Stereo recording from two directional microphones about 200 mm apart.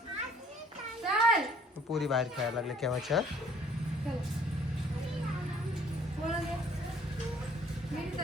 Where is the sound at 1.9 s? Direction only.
Centre (ahead or behind).